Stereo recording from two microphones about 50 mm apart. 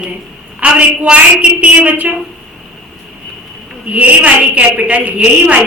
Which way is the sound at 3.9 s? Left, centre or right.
Right.